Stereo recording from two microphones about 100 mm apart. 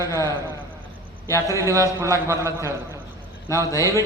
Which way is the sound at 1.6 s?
30° right (ahead or behind).